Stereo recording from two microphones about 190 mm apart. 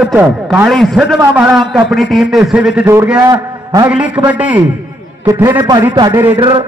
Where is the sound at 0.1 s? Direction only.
10° right (ahead or behind).